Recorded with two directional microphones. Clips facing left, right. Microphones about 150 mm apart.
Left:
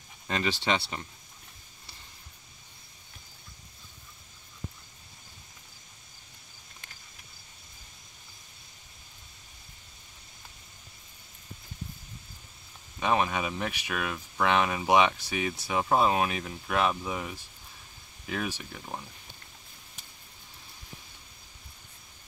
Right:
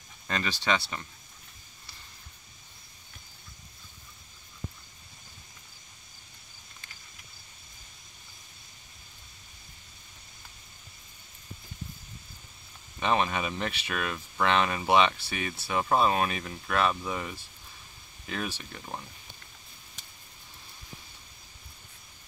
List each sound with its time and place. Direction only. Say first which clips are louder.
0.3 s speech: left 1 dB; 20° left (ahead or behind)
13.0 s speech: even; 10° left (ahead or behind)